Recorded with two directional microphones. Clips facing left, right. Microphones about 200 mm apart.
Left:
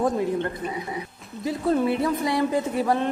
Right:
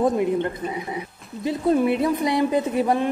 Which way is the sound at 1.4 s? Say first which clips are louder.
Right 3 dB; 20° right (ahead or behind).